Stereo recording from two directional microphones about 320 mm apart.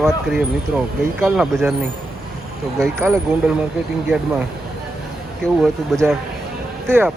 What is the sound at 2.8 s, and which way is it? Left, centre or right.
Speech, centre.